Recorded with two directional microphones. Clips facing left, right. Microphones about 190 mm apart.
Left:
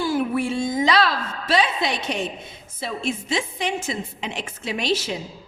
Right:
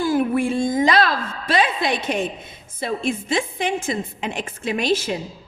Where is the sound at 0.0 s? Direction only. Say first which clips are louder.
Right 3 dB; 50° right (ahead or behind).